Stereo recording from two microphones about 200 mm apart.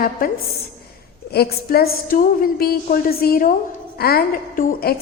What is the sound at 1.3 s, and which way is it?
A woman's voice, 50° left (ahead or behind).